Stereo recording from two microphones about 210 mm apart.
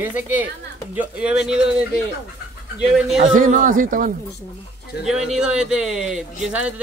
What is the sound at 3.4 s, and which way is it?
Speech, 40° right (ahead or behind).